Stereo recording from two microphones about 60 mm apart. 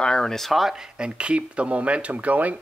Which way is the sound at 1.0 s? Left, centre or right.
Centre.